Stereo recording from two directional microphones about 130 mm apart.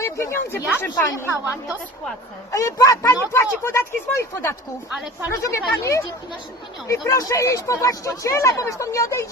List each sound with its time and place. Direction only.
0.0 s speech: 20° left (ahead or behind)
2.5 s speech: 25° left (ahead or behind)